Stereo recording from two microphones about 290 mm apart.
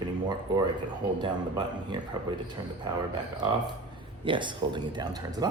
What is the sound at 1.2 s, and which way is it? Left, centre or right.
Speech, centre.